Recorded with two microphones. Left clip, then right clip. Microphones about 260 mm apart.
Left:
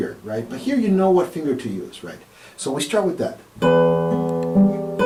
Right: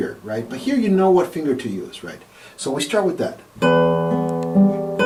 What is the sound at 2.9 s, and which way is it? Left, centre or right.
Speech, centre.